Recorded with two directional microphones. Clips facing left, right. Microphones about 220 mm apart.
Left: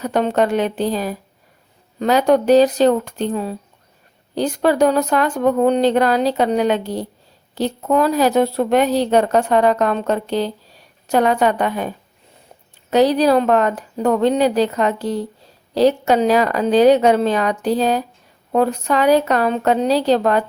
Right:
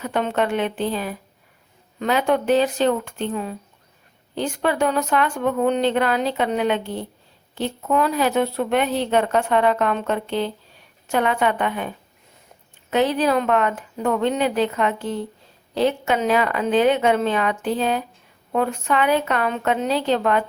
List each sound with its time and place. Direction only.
0.0 s speech: 40° left (ahead or behind)